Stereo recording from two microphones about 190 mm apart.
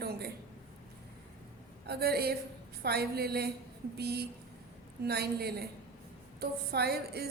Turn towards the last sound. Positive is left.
turn(degrees=-55)  # may be behind; listen again after turning